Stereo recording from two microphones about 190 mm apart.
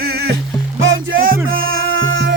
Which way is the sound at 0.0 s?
55° right (ahead or behind).